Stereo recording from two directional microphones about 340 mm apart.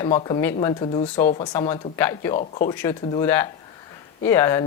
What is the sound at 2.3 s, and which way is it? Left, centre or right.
Speech, left.